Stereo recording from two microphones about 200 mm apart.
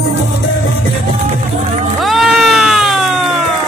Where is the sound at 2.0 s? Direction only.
Centre (ahead or behind).